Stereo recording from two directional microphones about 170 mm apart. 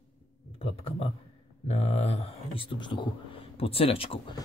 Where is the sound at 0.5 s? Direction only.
35° left (ahead or behind).